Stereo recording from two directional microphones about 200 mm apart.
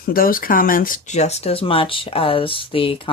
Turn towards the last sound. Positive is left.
turn(degrees=25)  # may be behind; listen again after turning